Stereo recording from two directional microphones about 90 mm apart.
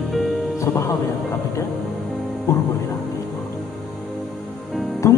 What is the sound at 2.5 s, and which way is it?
Speech, 30° left (ahead or behind).